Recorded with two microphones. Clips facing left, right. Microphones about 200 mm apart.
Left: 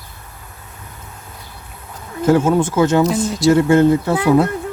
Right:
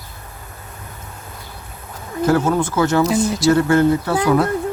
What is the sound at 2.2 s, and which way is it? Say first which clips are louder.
Speech: left 3 dB; 25° left (ahead or behind).